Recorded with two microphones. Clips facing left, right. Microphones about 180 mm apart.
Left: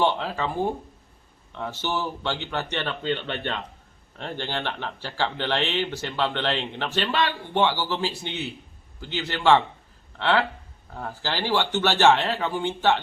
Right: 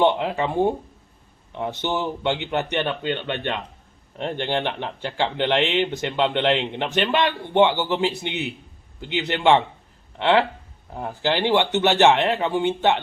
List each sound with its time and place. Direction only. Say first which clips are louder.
0.0 s speech: right 4 dB; 20° right (ahead or behind)
4.2 s speech: right 6 dB; 20° right (ahead or behind)